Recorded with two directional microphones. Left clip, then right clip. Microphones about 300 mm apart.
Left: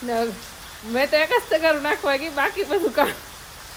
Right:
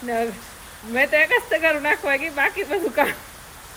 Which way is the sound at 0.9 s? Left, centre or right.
Centre.